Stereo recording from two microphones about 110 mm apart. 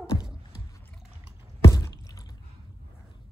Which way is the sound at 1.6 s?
30° left (ahead or behind).